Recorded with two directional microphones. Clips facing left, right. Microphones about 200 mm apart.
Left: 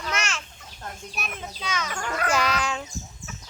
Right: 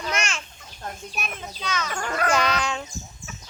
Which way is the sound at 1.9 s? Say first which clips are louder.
Right 2 dB; 45° right (ahead or behind).